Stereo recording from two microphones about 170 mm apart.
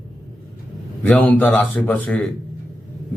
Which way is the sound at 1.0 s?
10° left (ahead or behind).